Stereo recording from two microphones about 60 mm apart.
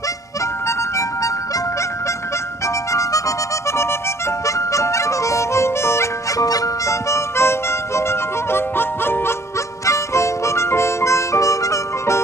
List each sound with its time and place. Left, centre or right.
0.7 s music: left
2.6 s harmonica: left
4.5 s harmonica: left
6.3 s harmonica: left
9.8 s harmonica: left